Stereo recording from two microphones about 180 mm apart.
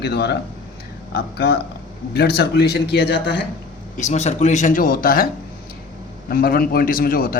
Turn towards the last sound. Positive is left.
turn(degrees=55)  # may be behind; listen again after turning